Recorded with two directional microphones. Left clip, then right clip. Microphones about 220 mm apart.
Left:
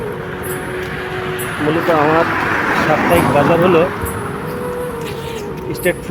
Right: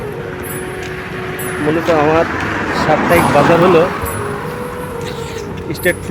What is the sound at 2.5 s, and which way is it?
Vehicle, 30° left (ahead or behind).